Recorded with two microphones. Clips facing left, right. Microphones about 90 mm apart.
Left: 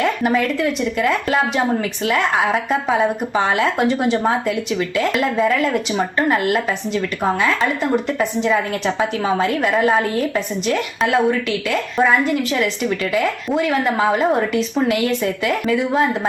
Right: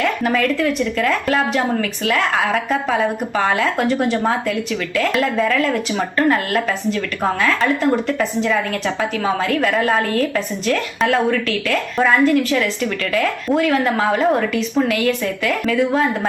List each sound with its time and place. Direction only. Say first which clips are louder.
0.0 s a sound: left 1 dB; 15° left (ahead or behind)
0.4 s speech: right 1 dB; 15° left (ahead or behind)
1.3 s speech: even; 5° left (ahead or behind)
1.8 s speech: even; 20° left (ahead or behind)
4.9 s speech: right 1 dB; 15° left (ahead or behind)
9.7 s speech: left 4 dB; 5° left (ahead or behind)
10.0 s speech: right 1 dB; 15° left (ahead or behind)
13.2 s speech: right 1 dB; 5° left (ahead or behind)
14.5 s speech: even; 25° left (ahead or behind)